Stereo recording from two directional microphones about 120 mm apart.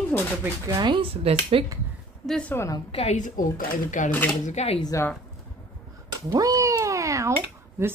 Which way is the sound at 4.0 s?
90° left.